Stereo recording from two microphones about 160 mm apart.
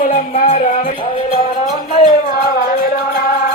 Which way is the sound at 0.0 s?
50° left (ahead or behind).